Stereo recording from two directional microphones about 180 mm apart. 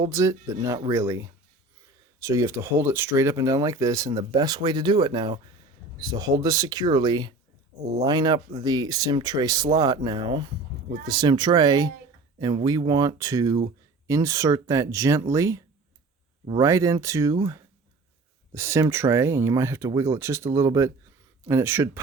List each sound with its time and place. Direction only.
0.1 s speech: 15° right (ahead or behind)
18.5 s speech: 15° right (ahead or behind)